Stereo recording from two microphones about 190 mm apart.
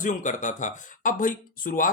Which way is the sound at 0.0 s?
40° left (ahead or behind).